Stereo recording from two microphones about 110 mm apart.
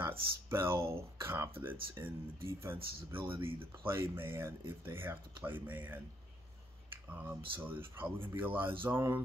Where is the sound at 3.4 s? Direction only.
20° right (ahead or behind).